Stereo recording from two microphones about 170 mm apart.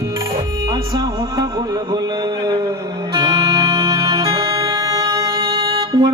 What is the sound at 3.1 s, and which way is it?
Music, 25° right (ahead or behind).